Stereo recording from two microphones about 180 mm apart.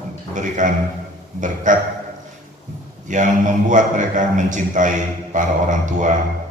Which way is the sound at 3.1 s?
45° right (ahead or behind).